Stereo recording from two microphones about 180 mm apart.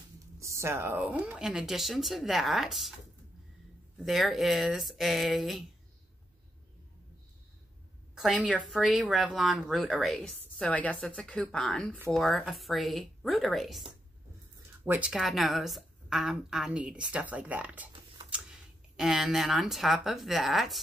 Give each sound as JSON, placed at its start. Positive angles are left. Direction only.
{"t": 0.4, "sound": "speech", "side_deg": -15}
{"t": 4.0, "sound": "speech", "side_deg": 0}
{"t": 8.1, "sound": "speech", "side_deg": -5}
{"t": 14.9, "sound": "speech", "side_deg": -5}
{"t": 18.9, "sound": "speech", "side_deg": 0}